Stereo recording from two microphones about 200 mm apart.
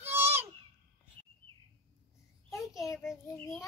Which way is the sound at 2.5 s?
15° left (ahead or behind).